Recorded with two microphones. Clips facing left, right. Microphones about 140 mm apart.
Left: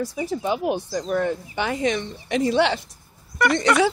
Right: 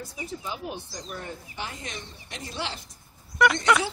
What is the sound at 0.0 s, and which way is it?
Speech, 85° left.